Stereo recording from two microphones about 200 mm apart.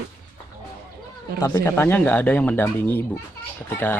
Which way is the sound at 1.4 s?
10° left (ahead or behind).